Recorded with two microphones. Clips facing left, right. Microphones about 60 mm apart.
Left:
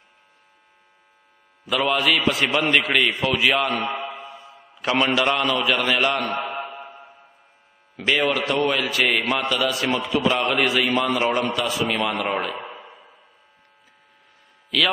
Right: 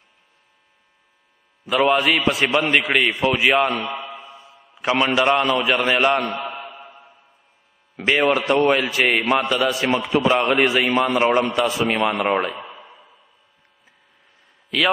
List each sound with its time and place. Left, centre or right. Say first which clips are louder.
1.7 s a man's voice: right 3 dB; centre
2.5 s a man's voice: right 1 dB; centre
3.8 s mantra: left 2 dB; left
5.1 s a man's voice: right 3 dB; centre
5.8 s a man's voice: right 3 dB; right
6.3 s mantra: left 2 dB; left
8.3 s a man's voice: right 4 dB; right
12.8 s a sound: left 1 dB; centre